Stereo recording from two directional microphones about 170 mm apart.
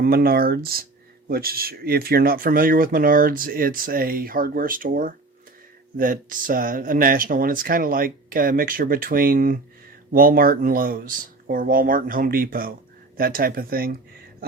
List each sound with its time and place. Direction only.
0.0 s speech: 60° right (ahead or behind)